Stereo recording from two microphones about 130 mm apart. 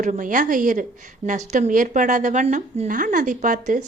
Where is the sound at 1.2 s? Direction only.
70° right (ahead or behind).